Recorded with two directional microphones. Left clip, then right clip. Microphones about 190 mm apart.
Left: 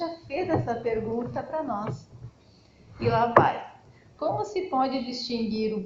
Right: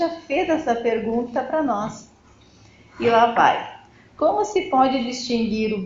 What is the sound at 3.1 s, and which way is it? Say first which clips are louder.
A woman's voice: right 5 dB; 40° right (ahead or behind).